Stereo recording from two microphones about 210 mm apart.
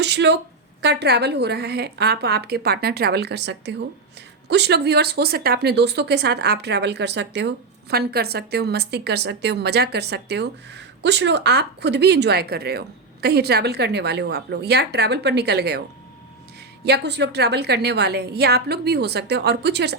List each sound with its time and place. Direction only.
0.0 s speech: 55° right (ahead or behind)
16.8 s speech: 50° right (ahead or behind)